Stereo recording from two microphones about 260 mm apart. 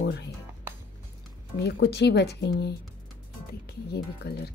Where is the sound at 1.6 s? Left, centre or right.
Left.